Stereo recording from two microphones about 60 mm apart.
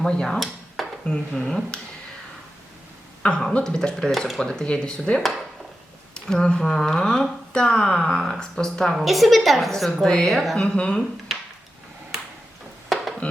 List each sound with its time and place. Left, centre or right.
0.0 s stir: centre
1.0 s speech: centre
3.2 s a woman's voice: centre
10.6 s speech: centre
11.3 s a sound: centre
12.9 s a sound: centre